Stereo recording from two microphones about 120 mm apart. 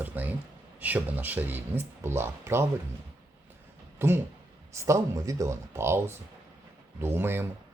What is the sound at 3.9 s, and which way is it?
Speech, 20° right (ahead or behind).